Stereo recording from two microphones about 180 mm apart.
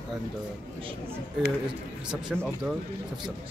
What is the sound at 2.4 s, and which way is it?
Speech, centre (ahead or behind).